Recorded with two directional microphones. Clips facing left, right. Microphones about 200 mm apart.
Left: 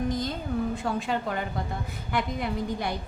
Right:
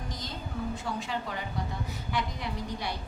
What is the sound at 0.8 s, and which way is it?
A woman's voice, 55° left (ahead or behind).